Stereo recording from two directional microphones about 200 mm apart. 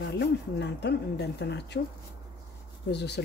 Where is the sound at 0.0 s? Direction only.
60° left (ahead or behind).